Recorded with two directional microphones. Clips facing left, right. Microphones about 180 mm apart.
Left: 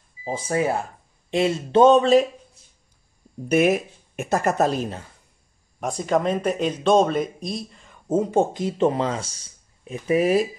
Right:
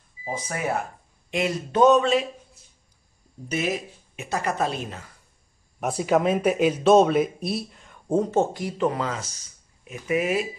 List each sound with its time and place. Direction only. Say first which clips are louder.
0.2 s a sound: left 6 dB; 30° left (ahead or behind)
3.4 s speech: left 8 dB; 55° left (ahead or behind); by 5.0 s 35° left (ahead or behind)
5.8 s speech: right 1 dB; 5° right (ahead or behind); by 10.5 s 35° left (ahead or behind)